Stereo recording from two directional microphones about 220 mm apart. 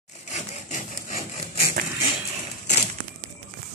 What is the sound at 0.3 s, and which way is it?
Wood, 35° left (ahead or behind).